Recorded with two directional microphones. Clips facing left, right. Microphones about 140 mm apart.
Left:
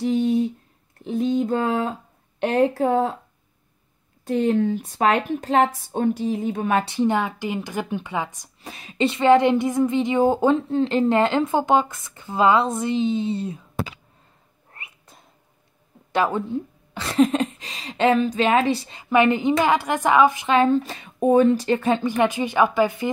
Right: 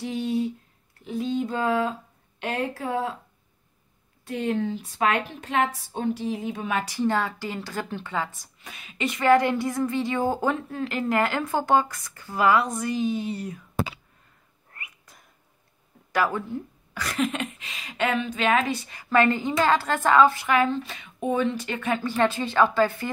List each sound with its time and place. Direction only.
0.2 s a sound: 45° left (ahead or behind)
2.4 s a woman's voice: 45° left (ahead or behind)
4.2 s a woman's voice: 45° left (ahead or behind)
6.8 s a woman's voice: 20° left (ahead or behind)
8.6 s a woman's voice: 35° left (ahead or behind)
14.7 s a sound: 25° left (ahead or behind)
16.1 s speech: 20° left (ahead or behind)
20.7 s speech: 40° left (ahead or behind)
22.0 s a woman's voice: 15° left (ahead or behind)